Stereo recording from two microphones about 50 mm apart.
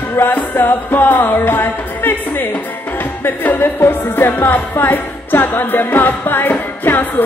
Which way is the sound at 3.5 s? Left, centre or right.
Left.